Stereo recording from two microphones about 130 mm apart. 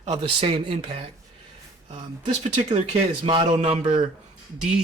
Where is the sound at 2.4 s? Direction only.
60° right (ahead or behind).